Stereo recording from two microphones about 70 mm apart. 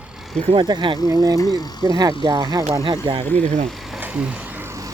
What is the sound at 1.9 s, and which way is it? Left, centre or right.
Speech, right.